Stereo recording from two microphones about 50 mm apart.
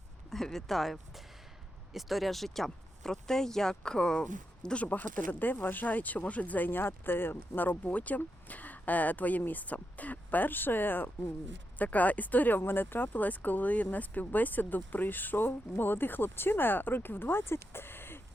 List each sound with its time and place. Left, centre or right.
0.3 s speech: centre
4.9 s speech: left
6.7 s speech: left